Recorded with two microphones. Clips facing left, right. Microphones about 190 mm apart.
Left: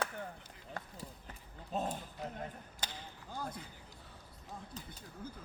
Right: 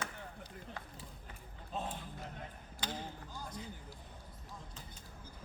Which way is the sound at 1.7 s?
40° left (ahead or behind).